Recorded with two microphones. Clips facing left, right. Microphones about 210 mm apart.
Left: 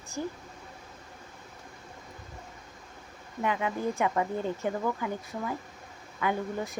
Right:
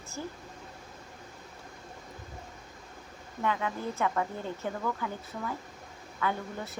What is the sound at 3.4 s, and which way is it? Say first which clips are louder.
A woman's voice: left 2 dB; 15° left (ahead or behind).